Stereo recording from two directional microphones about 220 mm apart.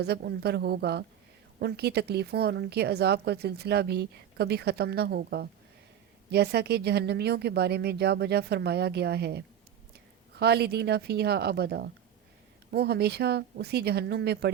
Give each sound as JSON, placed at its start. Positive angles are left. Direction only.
{"t": 0.0, "sound": "speech", "side_deg": -45}